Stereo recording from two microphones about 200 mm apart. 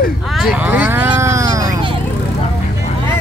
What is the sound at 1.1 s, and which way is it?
Wild animals, 15° right (ahead or behind).